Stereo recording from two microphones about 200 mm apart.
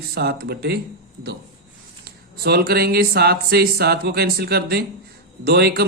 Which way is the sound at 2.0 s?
50° right (ahead or behind).